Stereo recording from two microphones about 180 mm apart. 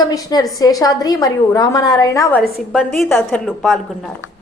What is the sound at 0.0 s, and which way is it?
A woman's voice, 20° left (ahead or behind).